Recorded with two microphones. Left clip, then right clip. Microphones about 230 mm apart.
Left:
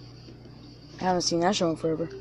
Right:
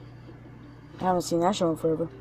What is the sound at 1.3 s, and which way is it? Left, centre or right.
Speech, centre.